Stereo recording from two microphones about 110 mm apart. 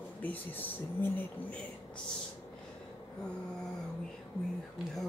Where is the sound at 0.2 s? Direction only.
15° left (ahead or behind).